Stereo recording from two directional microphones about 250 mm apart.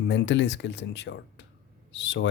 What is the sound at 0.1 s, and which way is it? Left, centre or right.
Speech, left.